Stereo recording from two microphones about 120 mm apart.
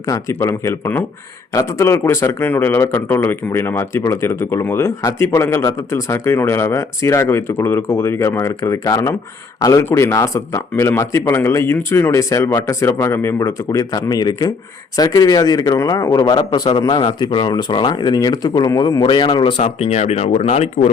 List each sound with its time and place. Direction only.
0.0 s a man's voice: 30° left (ahead or behind)
13.7 s speech: 35° left (ahead or behind); by 20.9 s 60° left (ahead or behind)